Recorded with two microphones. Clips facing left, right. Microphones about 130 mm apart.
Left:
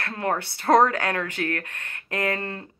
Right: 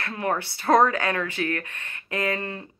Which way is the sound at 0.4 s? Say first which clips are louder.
Left 1 dB; 55° left (ahead or behind).